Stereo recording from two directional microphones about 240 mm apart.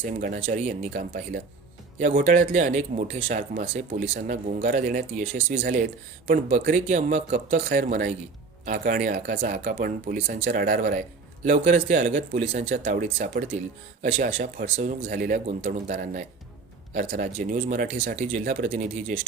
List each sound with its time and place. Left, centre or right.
0.0 s speech: right